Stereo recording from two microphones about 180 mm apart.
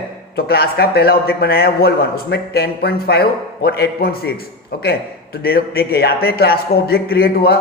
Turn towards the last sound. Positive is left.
turn(degrees=60)  # may be behind; listen again after turning